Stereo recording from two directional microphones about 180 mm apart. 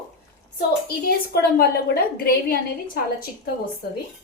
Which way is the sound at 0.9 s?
55° left (ahead or behind).